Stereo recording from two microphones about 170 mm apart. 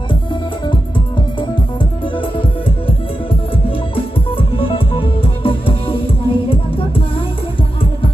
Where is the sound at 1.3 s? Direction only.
30° left (ahead or behind).